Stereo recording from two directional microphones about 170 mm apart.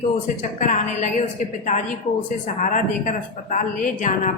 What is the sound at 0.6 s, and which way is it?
Speech, 50° left (ahead or behind).